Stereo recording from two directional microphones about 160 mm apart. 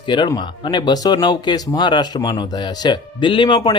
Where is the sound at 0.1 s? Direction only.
30° left (ahead or behind).